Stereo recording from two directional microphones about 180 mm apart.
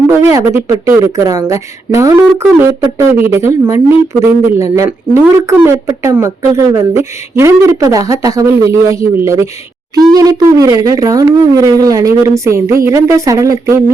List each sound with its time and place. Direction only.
0.1 s speech: 15° right (ahead or behind)